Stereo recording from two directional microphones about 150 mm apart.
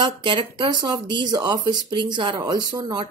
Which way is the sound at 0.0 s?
30° right (ahead or behind).